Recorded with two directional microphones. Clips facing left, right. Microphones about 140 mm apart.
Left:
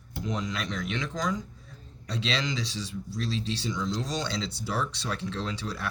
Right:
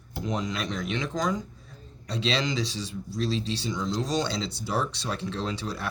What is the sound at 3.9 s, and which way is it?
Speech, 20° right (ahead or behind).